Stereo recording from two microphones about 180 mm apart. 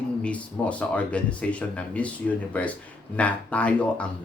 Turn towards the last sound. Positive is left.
turn(degrees=5)  # may be behind; listen again after turning